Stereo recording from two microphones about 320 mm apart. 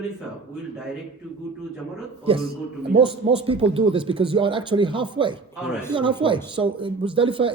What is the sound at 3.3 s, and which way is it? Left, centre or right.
Speech, centre.